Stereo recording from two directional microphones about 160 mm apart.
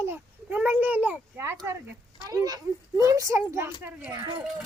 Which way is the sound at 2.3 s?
25° right (ahead or behind).